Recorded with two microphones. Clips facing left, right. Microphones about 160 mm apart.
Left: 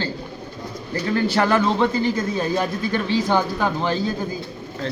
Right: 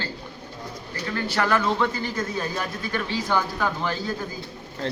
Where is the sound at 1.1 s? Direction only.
25° left (ahead or behind).